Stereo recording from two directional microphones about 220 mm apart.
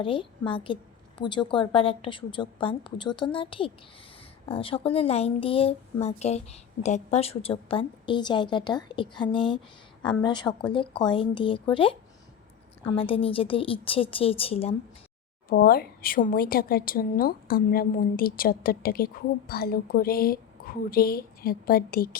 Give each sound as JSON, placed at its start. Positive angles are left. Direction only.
{"t": 0.0, "sound": "speech", "side_deg": 25}
{"t": 13.0, "sound": "speech", "side_deg": 25}
{"t": 15.4, "sound": "a woman's voice", "side_deg": 45}